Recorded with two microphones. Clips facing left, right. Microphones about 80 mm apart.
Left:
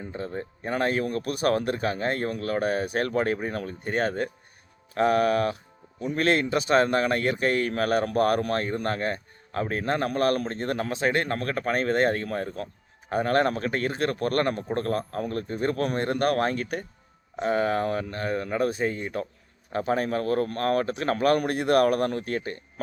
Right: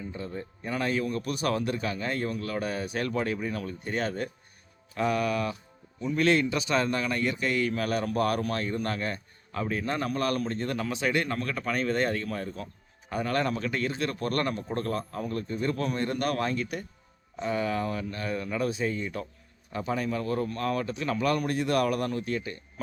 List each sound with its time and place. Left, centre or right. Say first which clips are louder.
0.0 s speech: left 3 dB; left